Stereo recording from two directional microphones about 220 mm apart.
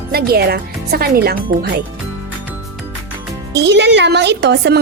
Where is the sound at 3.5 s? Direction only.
50° right (ahead or behind).